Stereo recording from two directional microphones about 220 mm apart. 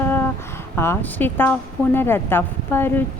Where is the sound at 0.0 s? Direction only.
10° left (ahead or behind).